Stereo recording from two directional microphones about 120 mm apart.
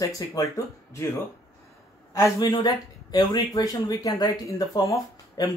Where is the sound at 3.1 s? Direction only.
30° left (ahead or behind).